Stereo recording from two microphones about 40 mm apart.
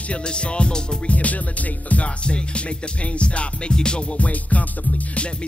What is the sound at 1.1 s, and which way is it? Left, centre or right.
Music, left.